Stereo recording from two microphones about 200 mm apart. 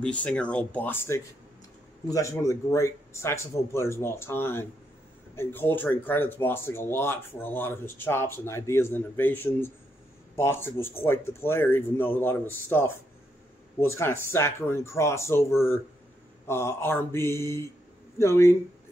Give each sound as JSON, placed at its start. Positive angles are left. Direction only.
{"t": 0.0, "sound": "speech", "side_deg": 5}